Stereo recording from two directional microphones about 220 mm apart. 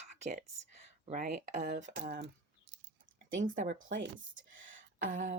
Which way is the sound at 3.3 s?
35° right (ahead or behind).